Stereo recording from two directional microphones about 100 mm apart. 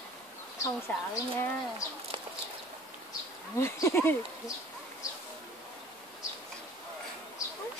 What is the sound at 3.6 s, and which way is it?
Speech, 25° left (ahead or behind).